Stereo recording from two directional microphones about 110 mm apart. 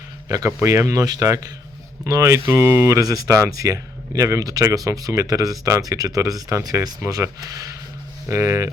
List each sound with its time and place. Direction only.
0.3 s speech: 30° right (ahead or behind)